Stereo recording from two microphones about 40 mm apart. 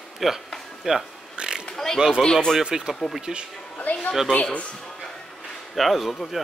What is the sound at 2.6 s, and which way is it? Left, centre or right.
Speech, centre.